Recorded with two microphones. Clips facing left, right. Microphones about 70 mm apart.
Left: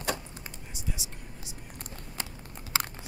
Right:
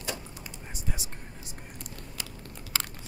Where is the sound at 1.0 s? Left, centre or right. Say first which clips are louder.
Right 1 dB; right.